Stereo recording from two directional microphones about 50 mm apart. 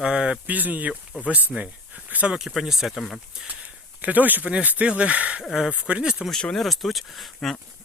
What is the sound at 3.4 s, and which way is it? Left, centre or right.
Speech, right.